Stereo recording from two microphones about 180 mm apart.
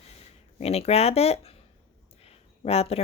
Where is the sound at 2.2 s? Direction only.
35° left (ahead or behind).